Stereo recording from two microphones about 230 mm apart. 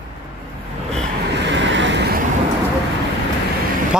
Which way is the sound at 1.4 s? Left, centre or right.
Right.